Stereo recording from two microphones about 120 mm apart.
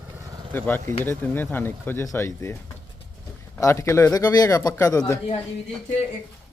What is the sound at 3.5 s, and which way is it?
Speech, 25° left (ahead or behind).